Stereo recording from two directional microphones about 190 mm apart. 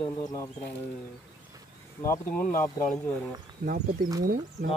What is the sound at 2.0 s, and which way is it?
Speech, 15° left (ahead or behind).